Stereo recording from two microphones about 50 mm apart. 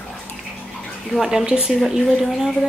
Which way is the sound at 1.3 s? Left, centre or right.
Centre.